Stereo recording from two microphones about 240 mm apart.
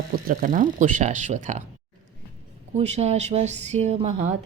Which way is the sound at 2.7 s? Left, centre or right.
Right.